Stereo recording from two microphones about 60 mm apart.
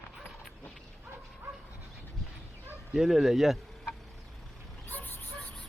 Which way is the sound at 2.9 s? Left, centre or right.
Centre.